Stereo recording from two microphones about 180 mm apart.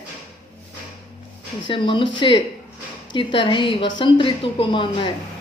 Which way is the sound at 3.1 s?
25° left (ahead or behind).